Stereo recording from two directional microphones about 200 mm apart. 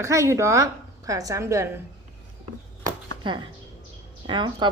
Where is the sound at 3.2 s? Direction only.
25° right (ahead or behind).